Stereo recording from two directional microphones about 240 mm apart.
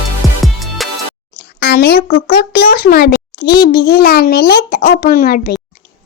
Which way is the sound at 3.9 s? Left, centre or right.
Left.